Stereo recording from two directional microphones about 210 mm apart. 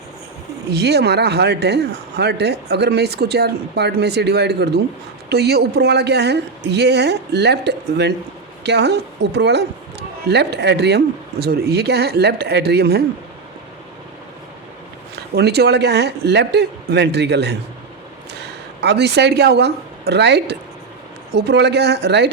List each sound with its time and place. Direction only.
0.7 s speech: 50° right (ahead or behind)
15.4 s speech: 50° right (ahead or behind)
18.8 s speech: 55° right (ahead or behind)